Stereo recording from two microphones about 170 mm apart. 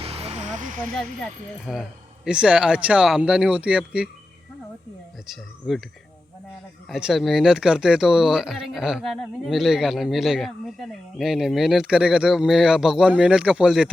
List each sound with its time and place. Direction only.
0.0 s vehicle: 35° right (ahead or behind); by 0.9 s 50° right (ahead or behind)
1.7 s speech: centre (ahead or behind)
5.7 s speech: centre (ahead or behind)
6.8 s speech: centre (ahead or behind)